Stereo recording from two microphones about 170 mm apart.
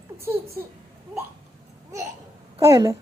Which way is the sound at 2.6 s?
20° right (ahead or behind).